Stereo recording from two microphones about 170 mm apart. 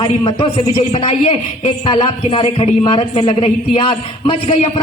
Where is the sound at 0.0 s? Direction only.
30° left (ahead or behind).